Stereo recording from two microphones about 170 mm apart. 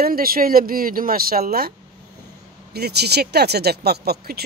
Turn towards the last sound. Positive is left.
turn(degrees=-65)  # may be behind; listen again after turning